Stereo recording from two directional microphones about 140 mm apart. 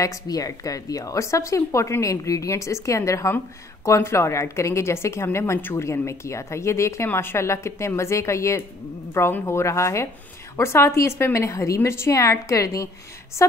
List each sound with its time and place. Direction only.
0.0 s a woman's voice: 25° left (ahead or behind)